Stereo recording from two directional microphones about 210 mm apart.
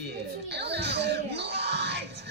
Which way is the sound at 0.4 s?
55° right (ahead or behind).